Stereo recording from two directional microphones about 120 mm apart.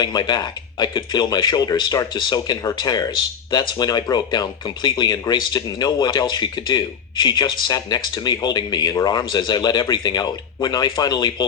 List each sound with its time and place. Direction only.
0.0 s speech: 35° left (ahead or behind)